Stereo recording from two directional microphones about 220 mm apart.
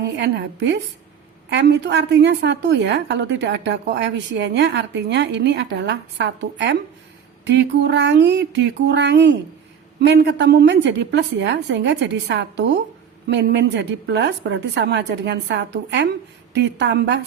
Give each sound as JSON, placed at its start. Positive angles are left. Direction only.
{"t": 0.0, "sound": "a woman's voice", "side_deg": -50}